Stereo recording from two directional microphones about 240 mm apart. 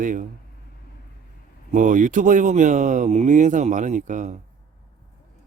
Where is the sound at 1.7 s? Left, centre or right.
Right.